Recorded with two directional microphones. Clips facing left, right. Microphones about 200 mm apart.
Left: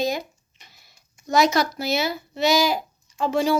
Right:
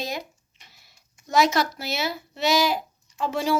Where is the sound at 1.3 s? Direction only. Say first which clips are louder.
Left 2 dB; 5° right (ahead or behind).